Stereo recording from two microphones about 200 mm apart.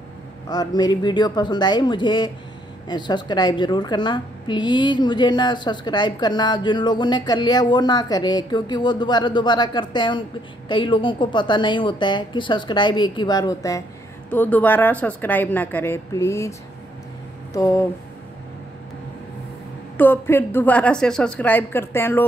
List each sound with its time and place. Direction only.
0.5 s a woman's voice: 20° left (ahead or behind)
20.0 s speech: 10° left (ahead or behind)